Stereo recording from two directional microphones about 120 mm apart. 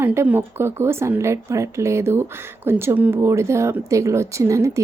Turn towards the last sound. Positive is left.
turn(degrees=-25)  # may be behind; listen again after turning